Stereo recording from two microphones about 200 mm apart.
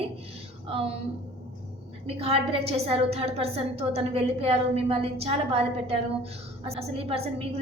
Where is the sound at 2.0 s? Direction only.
30° right (ahead or behind).